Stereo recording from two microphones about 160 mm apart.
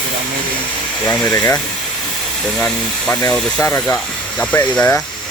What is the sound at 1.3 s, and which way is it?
Speech, 20° left (ahead or behind).